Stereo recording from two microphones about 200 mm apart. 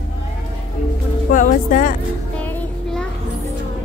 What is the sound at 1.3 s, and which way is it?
Speech, 40° left (ahead or behind).